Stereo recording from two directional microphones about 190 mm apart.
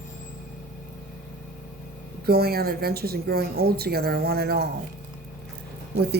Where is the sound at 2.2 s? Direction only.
55° right (ahead or behind).